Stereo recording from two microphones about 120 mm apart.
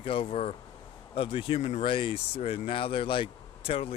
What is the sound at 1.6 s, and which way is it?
Speech, 65° left (ahead or behind).